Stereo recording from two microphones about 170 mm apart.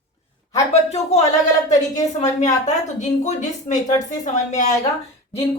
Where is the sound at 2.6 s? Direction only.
45° left (ahead or behind).